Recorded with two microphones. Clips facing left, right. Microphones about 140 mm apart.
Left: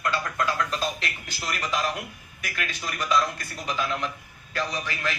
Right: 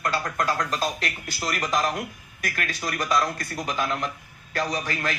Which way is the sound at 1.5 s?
45° right (ahead or behind).